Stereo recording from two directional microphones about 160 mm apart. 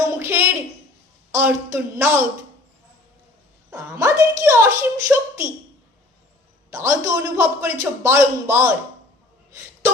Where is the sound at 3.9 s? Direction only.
20° right (ahead or behind).